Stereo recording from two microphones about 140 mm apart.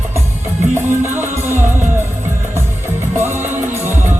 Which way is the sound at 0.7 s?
15° right (ahead or behind).